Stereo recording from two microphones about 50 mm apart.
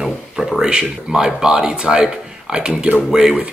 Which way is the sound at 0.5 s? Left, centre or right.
Centre.